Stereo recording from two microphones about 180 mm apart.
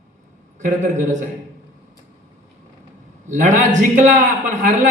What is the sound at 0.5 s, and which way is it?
Speech, 40° right (ahead or behind).